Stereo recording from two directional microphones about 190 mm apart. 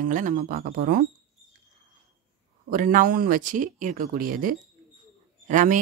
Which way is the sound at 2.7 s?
45° right (ahead or behind).